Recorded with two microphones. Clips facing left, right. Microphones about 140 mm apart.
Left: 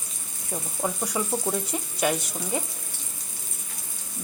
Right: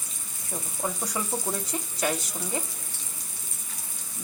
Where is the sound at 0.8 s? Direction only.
10° left (ahead or behind).